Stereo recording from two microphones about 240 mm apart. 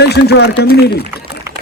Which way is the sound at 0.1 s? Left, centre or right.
Left.